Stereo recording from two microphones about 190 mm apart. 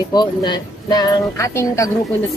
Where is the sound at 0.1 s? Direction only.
20° left (ahead or behind).